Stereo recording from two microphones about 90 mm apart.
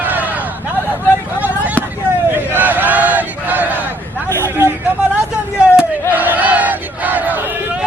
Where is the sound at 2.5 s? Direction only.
20° right (ahead or behind).